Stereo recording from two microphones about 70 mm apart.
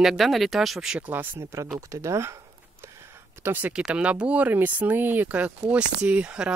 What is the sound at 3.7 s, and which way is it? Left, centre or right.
Speech, centre.